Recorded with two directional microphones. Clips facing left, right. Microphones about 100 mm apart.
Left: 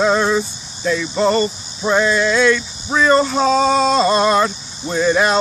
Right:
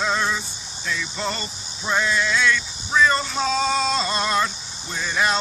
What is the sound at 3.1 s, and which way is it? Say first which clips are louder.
Speech: left 9 dB; 40° left (ahead or behind).